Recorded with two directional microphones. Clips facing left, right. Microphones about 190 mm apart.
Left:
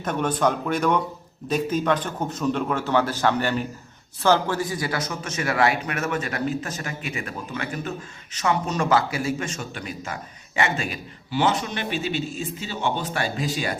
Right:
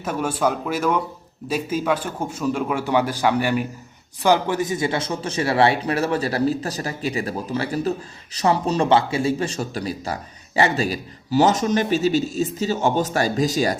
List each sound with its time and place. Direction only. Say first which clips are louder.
0.0 s a man's voice: even; 10° right (ahead or behind); by 13.7 s 40° right (ahead or behind)